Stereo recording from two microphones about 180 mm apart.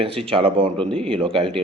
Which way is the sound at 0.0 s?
30° right (ahead or behind).